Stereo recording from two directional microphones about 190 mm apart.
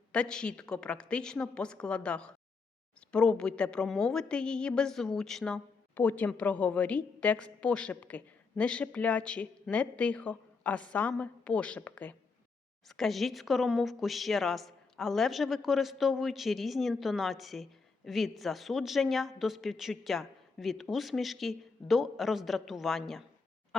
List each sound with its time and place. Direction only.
0.1 s speech: 5° left (ahead or behind)